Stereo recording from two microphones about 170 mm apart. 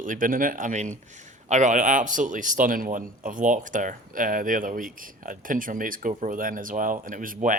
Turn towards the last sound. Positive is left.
turn(degrees=-55)  # may be behind; listen again after turning